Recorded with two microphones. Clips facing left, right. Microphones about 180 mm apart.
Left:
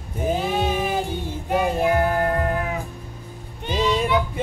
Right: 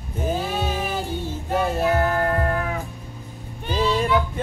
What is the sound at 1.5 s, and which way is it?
Child singing, 15° left (ahead or behind).